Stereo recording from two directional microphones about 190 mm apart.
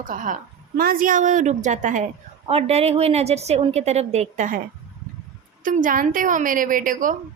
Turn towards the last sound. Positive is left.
turn(degrees=-45)  # may be behind; listen again after turning